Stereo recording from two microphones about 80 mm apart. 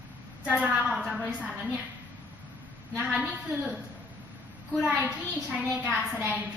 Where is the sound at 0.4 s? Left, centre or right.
Centre.